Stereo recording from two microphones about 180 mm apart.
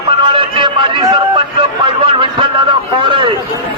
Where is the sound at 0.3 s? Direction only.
30° right (ahead or behind).